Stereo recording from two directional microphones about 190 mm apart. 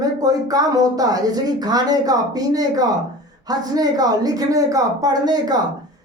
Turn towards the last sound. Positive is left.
turn(degrees=-20)  # may be behind; listen again after turning